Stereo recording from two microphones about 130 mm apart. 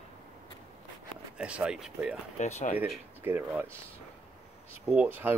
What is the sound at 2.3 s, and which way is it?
Speech, 65° left (ahead or behind).